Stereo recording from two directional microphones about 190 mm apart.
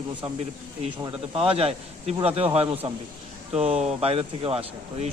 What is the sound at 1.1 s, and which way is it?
A man's voice, 30° right (ahead or behind).